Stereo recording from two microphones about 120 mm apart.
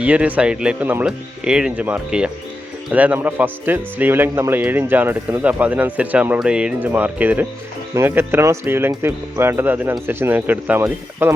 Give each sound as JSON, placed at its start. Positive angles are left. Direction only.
{"t": 0.0, "sound": "speech", "side_deg": -10}